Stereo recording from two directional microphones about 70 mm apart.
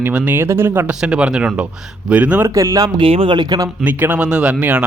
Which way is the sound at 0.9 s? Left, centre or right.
Centre.